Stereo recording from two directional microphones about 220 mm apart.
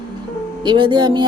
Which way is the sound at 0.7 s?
20° right (ahead or behind).